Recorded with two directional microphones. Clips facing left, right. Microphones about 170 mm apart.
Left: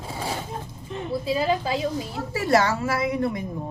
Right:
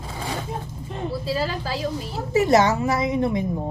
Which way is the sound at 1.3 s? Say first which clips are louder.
Left 4 dB; 20° left (ahead or behind).